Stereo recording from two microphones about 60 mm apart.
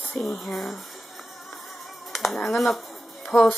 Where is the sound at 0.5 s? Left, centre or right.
Centre.